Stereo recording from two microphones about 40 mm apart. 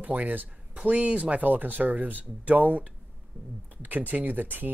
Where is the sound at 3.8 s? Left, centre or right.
Right.